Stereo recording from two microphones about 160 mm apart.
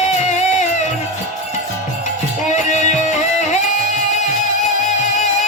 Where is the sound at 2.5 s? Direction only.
50° left (ahead or behind).